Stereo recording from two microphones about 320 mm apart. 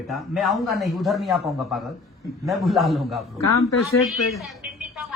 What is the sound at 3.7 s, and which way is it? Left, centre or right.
Speech, left.